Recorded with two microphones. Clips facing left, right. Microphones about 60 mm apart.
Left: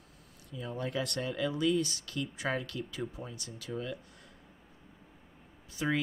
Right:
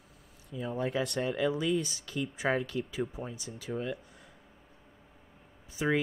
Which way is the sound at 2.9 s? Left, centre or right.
Centre.